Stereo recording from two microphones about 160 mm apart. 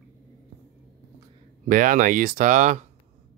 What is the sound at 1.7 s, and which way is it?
Speech, 55° right (ahead or behind).